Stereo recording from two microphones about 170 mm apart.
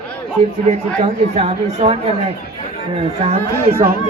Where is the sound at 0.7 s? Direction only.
40° right (ahead or behind).